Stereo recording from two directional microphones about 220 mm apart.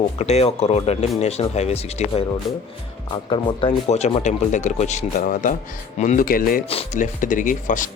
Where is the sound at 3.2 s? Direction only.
25° left (ahead or behind); by 6.6 s 40° left (ahead or behind).